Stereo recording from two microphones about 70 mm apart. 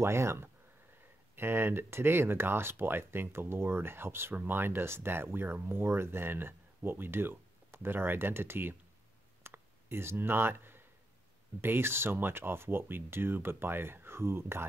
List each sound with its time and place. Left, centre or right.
0.0 s speech: right
9.4 s clicking: right
11.6 s speech: right